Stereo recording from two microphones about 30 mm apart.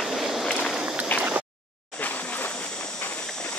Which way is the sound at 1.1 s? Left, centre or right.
Left.